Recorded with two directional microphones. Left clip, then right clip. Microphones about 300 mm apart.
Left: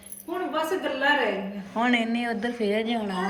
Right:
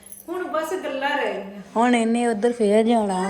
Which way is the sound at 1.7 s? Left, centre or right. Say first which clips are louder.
Right 5 dB; centre.